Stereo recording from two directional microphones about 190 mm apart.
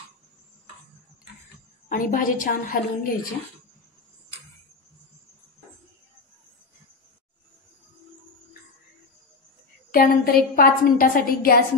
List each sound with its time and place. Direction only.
1.9 s a woman's voice: 45° left (ahead or behind)
9.8 s a woman's voice: 50° left (ahead or behind)